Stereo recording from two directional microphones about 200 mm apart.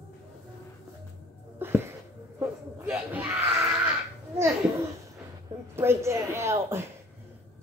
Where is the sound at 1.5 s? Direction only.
10° right (ahead or behind).